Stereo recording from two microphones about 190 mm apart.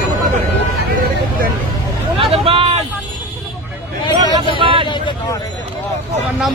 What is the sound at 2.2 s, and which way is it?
Vehicle, 30° right (ahead or behind).